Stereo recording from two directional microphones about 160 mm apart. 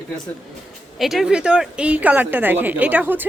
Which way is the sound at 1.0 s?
Centre (ahead or behind).